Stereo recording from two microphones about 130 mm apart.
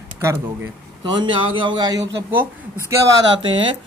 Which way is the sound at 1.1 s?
40° right (ahead or behind).